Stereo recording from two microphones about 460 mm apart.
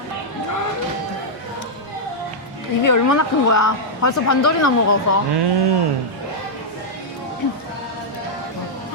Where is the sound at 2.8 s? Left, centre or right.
Left.